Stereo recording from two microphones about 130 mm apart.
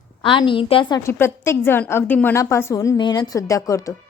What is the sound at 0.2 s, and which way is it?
Speech, 40° left (ahead or behind).